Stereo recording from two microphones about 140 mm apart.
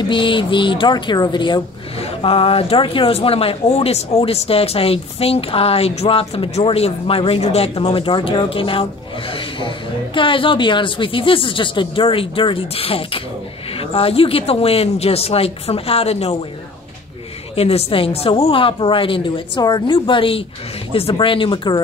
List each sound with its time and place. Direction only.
0.1 s speech: 35° left (ahead or behind)
17.6 s speech: 45° left (ahead or behind)